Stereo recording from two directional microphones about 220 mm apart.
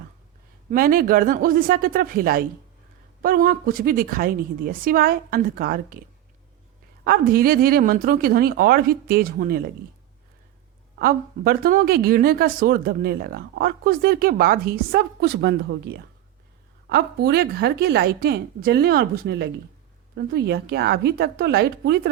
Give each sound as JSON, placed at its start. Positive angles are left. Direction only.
{"t": 0.7, "sound": "a woman's voice", "side_deg": -40}
{"t": 7.0, "sound": "a woman's voice", "side_deg": -40}
{"t": 10.9, "sound": "speech", "side_deg": -40}